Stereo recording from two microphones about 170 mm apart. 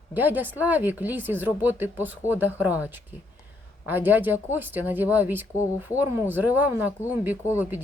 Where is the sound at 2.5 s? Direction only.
15° left (ahead or behind).